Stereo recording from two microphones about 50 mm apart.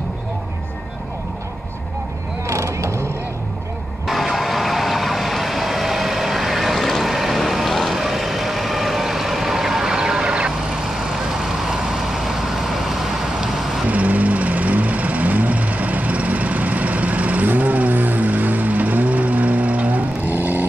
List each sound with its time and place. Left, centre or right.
2.4 s mechanisms: right
4.1 s vehicle: centre
10.9 s vehicle: centre
13.8 s vehicle: right